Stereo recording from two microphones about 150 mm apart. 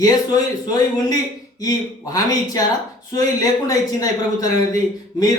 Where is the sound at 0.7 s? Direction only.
25° left (ahead or behind).